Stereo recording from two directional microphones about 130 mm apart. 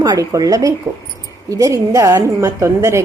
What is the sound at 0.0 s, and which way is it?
A woman's voice, 30° right (ahead or behind).